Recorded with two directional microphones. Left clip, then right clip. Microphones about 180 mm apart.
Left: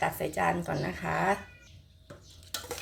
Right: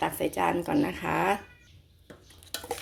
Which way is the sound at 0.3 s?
50° right (ahead or behind).